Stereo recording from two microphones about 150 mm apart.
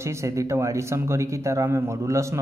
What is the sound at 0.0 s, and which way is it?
Speech, 20° right (ahead or behind).